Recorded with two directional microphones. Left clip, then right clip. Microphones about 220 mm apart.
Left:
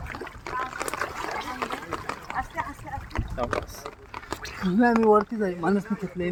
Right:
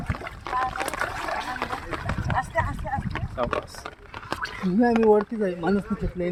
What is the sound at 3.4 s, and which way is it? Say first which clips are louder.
Speech: right 2 dB; 25° right (ahead or behind).